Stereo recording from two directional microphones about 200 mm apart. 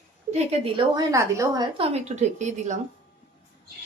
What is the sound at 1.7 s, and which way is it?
A woman's voice, 30° right (ahead or behind).